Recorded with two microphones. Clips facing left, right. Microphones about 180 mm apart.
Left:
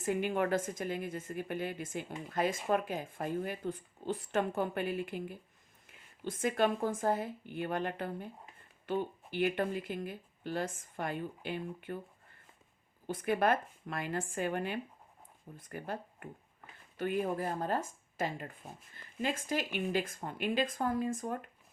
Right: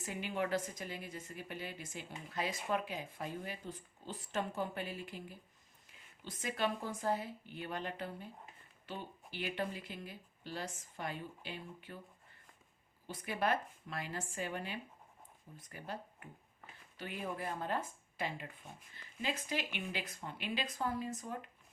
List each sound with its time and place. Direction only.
0.0 s a woman's voice: 50° left (ahead or behind)
13.1 s a woman's voice: 50° left (ahead or behind)